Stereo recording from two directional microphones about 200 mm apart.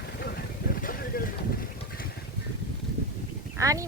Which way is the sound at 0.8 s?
45° left (ahead or behind).